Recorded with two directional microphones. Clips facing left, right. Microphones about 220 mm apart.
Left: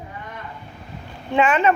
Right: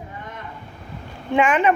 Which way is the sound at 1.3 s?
15° right (ahead or behind).